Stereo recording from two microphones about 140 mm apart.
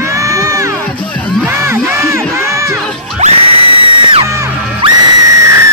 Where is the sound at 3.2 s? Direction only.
60° right (ahead or behind).